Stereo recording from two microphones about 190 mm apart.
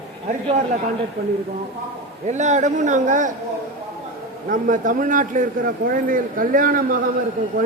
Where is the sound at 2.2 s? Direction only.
40° right (ahead or behind).